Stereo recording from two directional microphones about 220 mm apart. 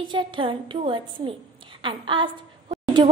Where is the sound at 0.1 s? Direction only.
25° right (ahead or behind).